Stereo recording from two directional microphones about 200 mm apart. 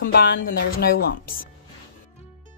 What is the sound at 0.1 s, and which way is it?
A woman's voice, 50° left (ahead or behind).